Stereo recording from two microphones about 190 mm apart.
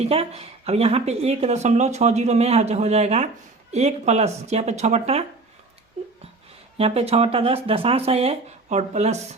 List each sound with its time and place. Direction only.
0.0 s speech: 30° right (ahead or behind)
6.7 s speech: 30° right (ahead or behind)